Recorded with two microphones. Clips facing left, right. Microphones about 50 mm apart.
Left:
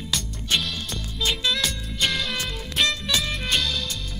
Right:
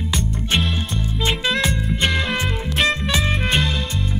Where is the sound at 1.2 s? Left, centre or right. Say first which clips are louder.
Right 4 dB; right.